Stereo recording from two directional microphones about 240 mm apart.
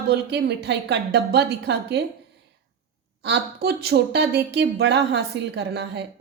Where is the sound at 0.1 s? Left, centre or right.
Right.